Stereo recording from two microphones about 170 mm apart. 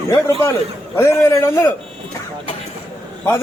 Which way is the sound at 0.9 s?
20° left (ahead or behind).